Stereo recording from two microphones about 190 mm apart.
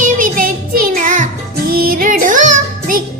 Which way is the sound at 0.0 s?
45° right (ahead or behind).